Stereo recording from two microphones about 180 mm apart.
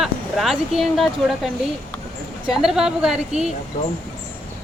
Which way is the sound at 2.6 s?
5° right (ahead or behind).